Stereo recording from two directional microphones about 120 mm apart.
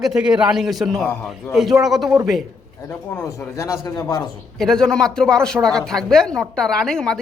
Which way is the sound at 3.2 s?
25° left (ahead or behind).